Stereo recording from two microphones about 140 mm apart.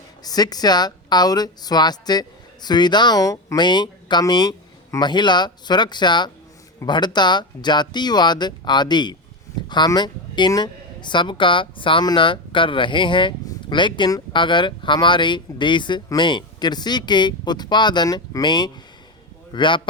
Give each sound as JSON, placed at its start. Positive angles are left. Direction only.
{"t": 0.2, "sound": "speech", "side_deg": 30}